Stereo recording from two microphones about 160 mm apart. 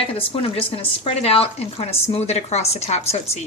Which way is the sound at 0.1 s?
35° left (ahead or behind).